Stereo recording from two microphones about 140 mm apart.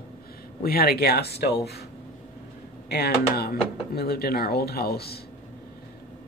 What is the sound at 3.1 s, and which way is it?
Speech, 90° left.